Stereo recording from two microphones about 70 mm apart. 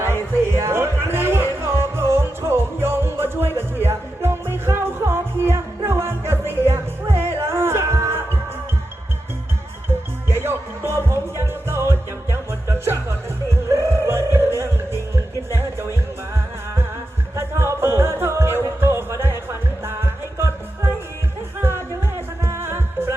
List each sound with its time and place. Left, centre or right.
0.6 s a sound: right
1.6 s music: right
10.2 s music: right
15.5 s music: right
17.3 s music: right
22.4 s music: right